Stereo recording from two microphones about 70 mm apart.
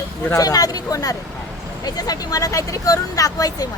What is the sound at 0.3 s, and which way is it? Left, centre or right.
Speech, left.